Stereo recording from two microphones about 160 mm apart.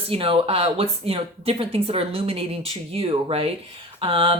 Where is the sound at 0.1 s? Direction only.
35° right (ahead or behind).